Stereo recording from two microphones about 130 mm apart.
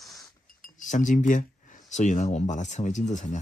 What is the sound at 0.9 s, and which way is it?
Speech, 70° left (ahead or behind).